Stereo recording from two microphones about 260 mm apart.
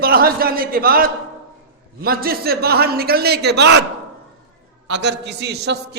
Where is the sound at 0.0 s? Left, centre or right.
Right.